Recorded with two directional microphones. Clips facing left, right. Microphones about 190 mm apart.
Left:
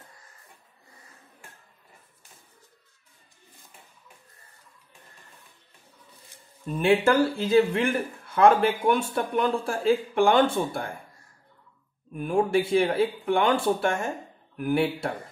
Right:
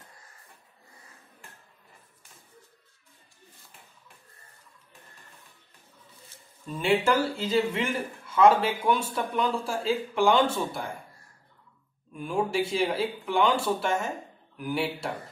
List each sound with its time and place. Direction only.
6.8 s speech: 55° left (ahead or behind)
12.1 s speech: 55° left (ahead or behind)